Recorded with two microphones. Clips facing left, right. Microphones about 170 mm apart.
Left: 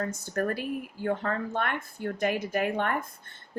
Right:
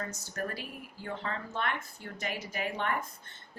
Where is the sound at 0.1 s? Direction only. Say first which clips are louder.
Left 8 dB; 50° left (ahead or behind).